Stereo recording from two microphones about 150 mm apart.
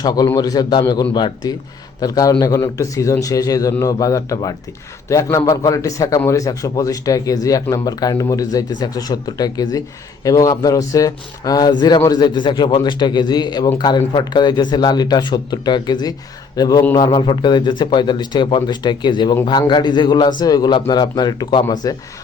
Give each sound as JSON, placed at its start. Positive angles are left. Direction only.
{"t": 0.0, "sound": "a man's voice", "side_deg": 25}